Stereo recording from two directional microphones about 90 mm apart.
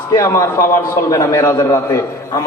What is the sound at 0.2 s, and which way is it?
A man's voice, 35° left (ahead or behind).